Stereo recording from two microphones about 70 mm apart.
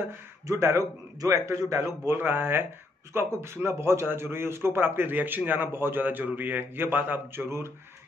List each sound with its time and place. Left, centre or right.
0.5 s a man's voice: right
2.1 s a man's voice: right
7.4 s a man's voice: right